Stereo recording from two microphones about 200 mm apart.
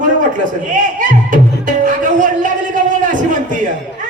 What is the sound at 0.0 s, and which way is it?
Music, 40° right (ahead or behind).